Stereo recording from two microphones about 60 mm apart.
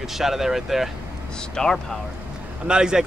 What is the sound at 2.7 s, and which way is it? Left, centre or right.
Speech, centre.